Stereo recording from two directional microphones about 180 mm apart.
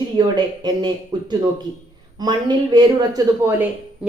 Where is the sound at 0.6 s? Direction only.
25° right (ahead or behind).